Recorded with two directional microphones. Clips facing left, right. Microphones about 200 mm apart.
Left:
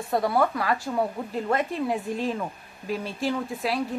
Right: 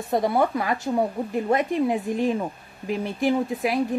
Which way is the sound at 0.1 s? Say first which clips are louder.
Right 2 dB; 20° right (ahead or behind).